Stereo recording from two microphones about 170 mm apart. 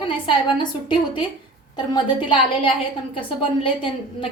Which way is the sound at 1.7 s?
25° left (ahead or behind).